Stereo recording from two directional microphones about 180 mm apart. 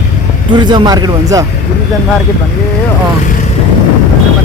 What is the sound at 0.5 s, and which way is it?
Speech, 25° right (ahead or behind).